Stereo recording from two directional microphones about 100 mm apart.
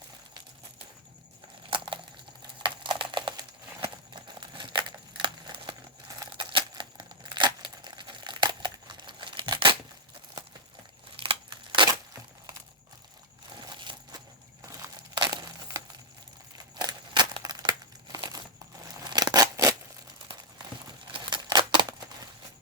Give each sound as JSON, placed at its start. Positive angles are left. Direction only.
{"t": 1.7, "sound": "a sound", "side_deg": -55}
{"t": 5.2, "sound": "crumpling", "side_deg": -55}
{"t": 6.5, "sound": "tearing", "side_deg": -55}
{"t": 11.2, "sound": "scissors", "side_deg": -60}
{"t": 13.6, "sound": "a sound", "side_deg": -45}
{"t": 15.1, "sound": "crumpling", "side_deg": -50}
{"t": 16.7, "sound": "crumpling", "side_deg": -45}
{"t": 19.0, "sound": "scissors", "side_deg": -40}
{"t": 21.1, "sound": "scissors", "side_deg": -55}